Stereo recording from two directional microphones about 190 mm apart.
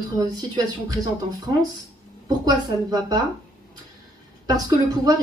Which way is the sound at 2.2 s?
20° right (ahead or behind).